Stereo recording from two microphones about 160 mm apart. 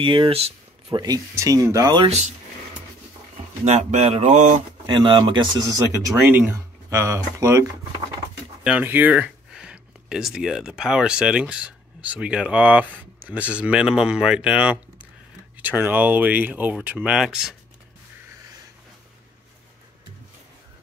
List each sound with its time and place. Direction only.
0.0 s speech: 30° right (ahead or behind)
1.0 s speech: 20° right (ahead or behind)
2.0 s speech: 45° right (ahead or behind)
3.6 s speech: 45° right (ahead or behind)
4.8 s speech: 30° right (ahead or behind)
6.1 s speech: 10° right (ahead or behind)
8.6 s speech: 10° right (ahead or behind)